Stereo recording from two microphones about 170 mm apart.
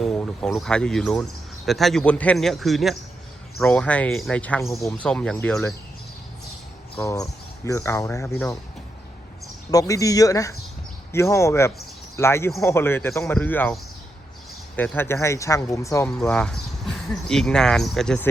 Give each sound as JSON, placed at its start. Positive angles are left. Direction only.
{"t": 0.0, "sound": "speech", "side_deg": 5}
{"t": 6.9, "sound": "speech", "side_deg": 15}
{"t": 9.7, "sound": "speech", "side_deg": 20}
{"t": 14.8, "sound": "speech", "side_deg": 15}
{"t": 16.0, "sound": "speech", "side_deg": 5}